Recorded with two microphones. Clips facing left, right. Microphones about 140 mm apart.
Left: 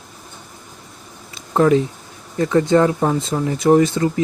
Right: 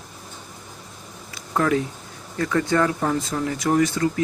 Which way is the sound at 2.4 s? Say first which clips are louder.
Left 6 dB; 20° left (ahead or behind).